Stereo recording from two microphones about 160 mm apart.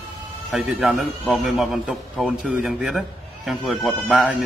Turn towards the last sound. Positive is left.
turn(degrees=-5)  # may be behind; listen again after turning